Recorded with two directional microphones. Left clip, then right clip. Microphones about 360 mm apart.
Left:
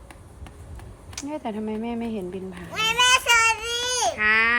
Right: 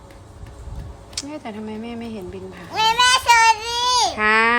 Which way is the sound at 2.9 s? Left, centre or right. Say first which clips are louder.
Right 3 dB; right.